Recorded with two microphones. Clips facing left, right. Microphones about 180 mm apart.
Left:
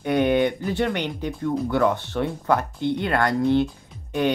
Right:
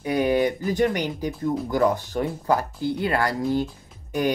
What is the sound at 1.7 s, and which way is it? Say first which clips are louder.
Speech: right 1 dB; 35° right (ahead or behind).